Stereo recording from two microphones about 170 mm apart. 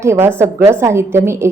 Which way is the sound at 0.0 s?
15° right (ahead or behind).